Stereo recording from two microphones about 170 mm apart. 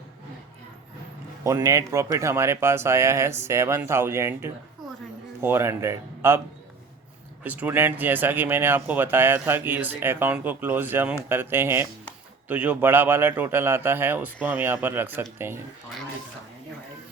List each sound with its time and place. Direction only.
1.5 s speech: 20° right (ahead or behind)
7.4 s speech: 10° right (ahead or behind)